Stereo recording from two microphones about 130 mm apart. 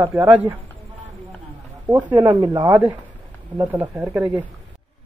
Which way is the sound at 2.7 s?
15° right (ahead or behind).